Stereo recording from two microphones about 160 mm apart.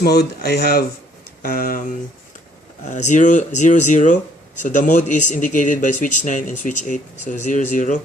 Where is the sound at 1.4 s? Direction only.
65° left (ahead or behind).